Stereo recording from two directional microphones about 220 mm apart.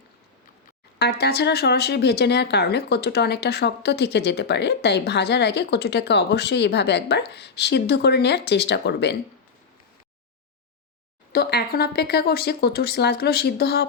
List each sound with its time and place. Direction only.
0.9 s speech: 45° left (ahead or behind)
11.3 s speech: 45° left (ahead or behind)